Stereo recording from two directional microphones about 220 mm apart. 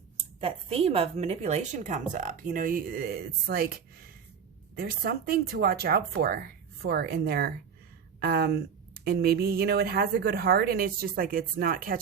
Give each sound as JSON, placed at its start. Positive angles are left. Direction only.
{"t": 0.2, "sound": "a woman's voice", "side_deg": -25}